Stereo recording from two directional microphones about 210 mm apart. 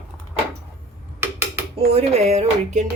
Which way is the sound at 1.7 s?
30° right (ahead or behind).